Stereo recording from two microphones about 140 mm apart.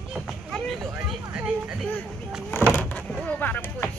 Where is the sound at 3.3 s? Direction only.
10° left (ahead or behind).